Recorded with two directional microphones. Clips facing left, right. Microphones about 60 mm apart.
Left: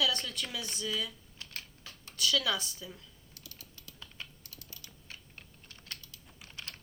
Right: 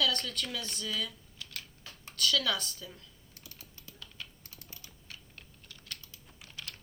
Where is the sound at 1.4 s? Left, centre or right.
Left.